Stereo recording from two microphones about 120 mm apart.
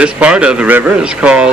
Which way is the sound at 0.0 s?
10° right (ahead or behind).